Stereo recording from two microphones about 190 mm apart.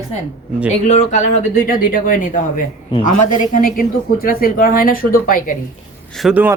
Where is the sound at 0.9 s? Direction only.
35° left (ahead or behind).